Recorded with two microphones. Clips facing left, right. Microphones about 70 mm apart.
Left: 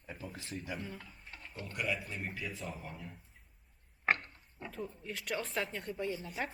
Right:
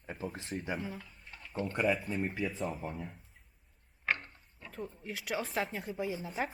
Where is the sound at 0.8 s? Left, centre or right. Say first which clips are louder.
Right 4 dB; centre.